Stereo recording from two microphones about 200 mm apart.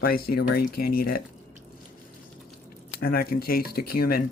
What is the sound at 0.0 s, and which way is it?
Speech, 50° left (ahead or behind).